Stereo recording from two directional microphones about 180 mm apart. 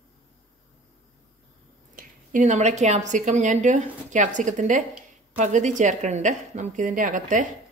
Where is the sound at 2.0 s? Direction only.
45° right (ahead or behind).